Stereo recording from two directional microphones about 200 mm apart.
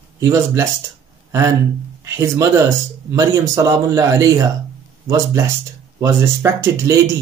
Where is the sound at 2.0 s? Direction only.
15° right (ahead or behind).